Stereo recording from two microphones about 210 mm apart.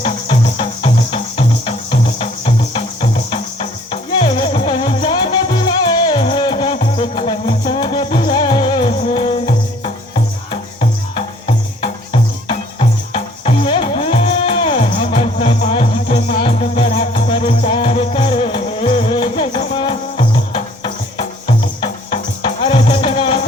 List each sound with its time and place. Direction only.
0.0 s music: 25° left (ahead or behind)